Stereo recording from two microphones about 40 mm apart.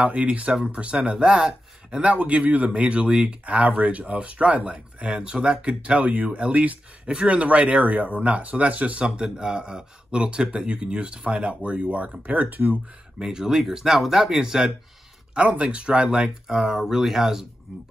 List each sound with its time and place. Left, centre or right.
0.0 s speech: right
1.2 s speech: centre
2.0 s speech: right
2.7 s speech: right
3.4 s speech: right
9.0 s speech: right
13.2 s speech: centre
15.4 s speech: right; by 17.5 s centre